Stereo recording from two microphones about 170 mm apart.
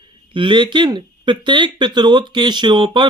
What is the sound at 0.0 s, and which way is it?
Speech, 30° right (ahead or behind).